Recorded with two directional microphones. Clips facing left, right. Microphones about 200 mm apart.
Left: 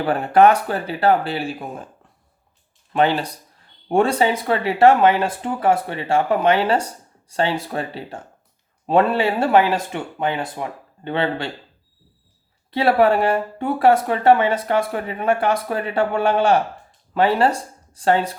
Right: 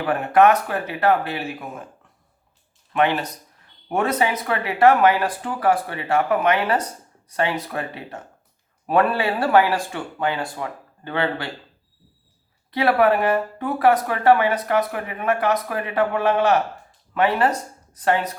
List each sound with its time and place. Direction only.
0.0 s speech: 30° left (ahead or behind)
2.9 s speech: 30° left (ahead or behind)
12.7 s speech: 30° left (ahead or behind)